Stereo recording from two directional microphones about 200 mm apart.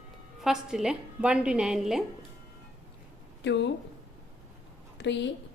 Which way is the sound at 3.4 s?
60° left (ahead or behind).